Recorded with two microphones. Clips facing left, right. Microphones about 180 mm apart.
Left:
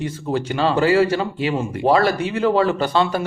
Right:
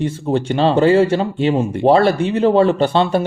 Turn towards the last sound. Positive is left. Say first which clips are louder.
# right 4 dB
turn(degrees=-25)  # may be behind; listen again after turning